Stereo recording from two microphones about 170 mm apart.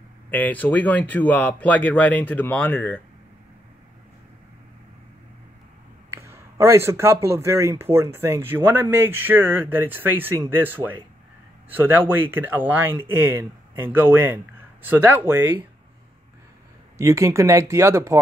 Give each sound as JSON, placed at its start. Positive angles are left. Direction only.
{"t": 0.3, "sound": "speech", "side_deg": 10}
{"t": 6.0, "sound": "speech", "side_deg": -15}
{"t": 17.0, "sound": "speech", "side_deg": -15}